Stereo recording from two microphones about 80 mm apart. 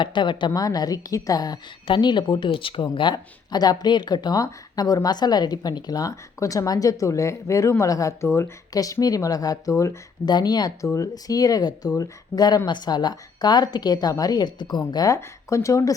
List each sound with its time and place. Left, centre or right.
0.0 s speech: left
0.6 s speech: left
1.9 s speech: left
8.7 s speech: left
10.2 s speech: left
10.8 s speech: left
15.0 s speech: left